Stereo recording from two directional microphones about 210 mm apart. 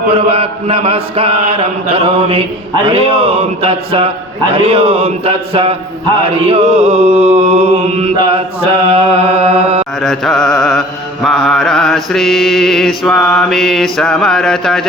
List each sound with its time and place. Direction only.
0.1 s a man's voice: 25° right (ahead or behind)
10.0 s mantra: centre (ahead or behind)